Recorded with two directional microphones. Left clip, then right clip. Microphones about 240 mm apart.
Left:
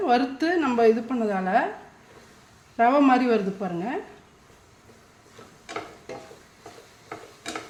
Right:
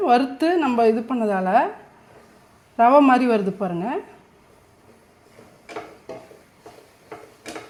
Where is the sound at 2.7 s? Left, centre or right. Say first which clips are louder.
Right 5 dB; right.